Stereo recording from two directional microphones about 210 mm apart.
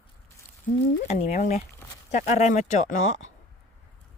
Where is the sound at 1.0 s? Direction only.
30° left (ahead or behind).